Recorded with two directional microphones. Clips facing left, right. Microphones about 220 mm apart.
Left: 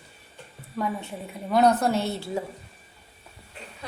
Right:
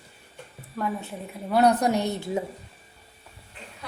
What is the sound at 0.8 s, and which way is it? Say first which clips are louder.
Speech: even; centre (ahead or behind).